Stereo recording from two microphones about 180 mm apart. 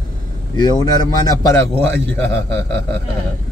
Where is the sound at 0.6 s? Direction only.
20° left (ahead or behind).